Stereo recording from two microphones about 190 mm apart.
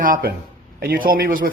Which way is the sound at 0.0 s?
50° right (ahead or behind).